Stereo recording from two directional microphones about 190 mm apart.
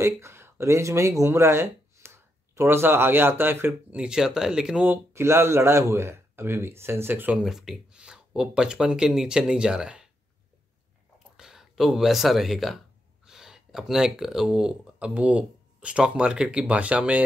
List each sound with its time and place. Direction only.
0.0 s speech: 15° right (ahead or behind)
11.3 s speech: 5° right (ahead or behind)